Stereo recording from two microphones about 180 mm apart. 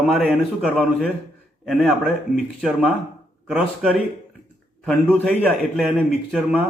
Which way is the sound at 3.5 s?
Centre (ahead or behind).